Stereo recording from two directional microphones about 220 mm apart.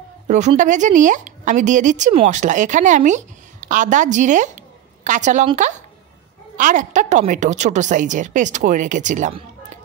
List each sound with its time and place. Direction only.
0.3 s a woman's voice: 35° right (ahead or behind)